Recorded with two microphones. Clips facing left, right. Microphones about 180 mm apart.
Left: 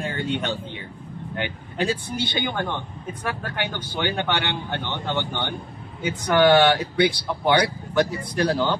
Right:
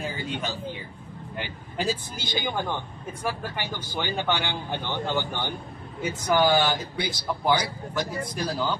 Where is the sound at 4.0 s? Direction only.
65° left (ahead or behind).